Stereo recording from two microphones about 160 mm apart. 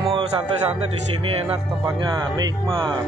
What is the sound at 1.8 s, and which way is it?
Speech, 25° right (ahead or behind).